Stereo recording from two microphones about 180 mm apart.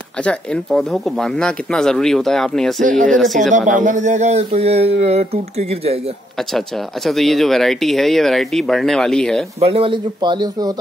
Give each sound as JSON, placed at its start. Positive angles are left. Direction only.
{"t": 0.2, "sound": "speech", "side_deg": 5}
{"t": 2.8, "sound": "speech", "side_deg": -45}
{"t": 7.1, "sound": "speech", "side_deg": 0}
{"t": 9.6, "sound": "a man's voice", "side_deg": -30}